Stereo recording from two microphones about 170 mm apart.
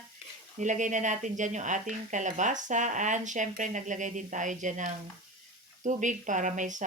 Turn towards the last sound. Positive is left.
turn(degrees=-45)  # may be behind; listen again after turning